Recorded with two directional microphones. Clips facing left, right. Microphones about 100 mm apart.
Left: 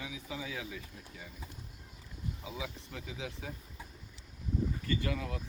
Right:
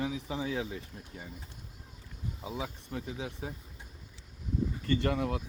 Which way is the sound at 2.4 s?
40° right (ahead or behind).